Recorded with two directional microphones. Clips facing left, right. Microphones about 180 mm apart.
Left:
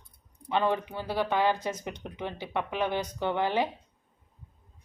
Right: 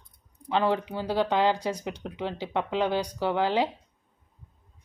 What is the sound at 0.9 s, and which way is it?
Speech, 15° right (ahead or behind).